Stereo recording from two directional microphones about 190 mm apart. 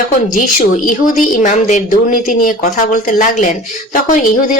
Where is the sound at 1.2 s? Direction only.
40° left (ahead or behind).